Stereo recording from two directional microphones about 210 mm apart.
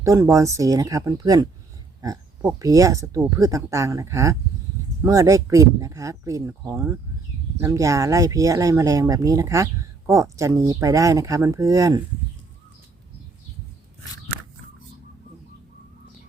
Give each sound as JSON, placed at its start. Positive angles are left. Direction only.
{"t": 0.0, "sound": "speech", "side_deg": -15}